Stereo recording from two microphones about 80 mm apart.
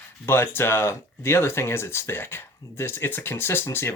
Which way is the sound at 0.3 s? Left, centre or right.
Left.